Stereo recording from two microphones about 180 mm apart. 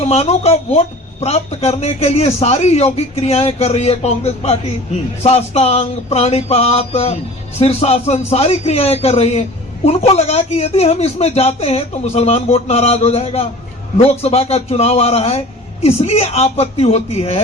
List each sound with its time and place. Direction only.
0.0 s speech: 35° left (ahead or behind)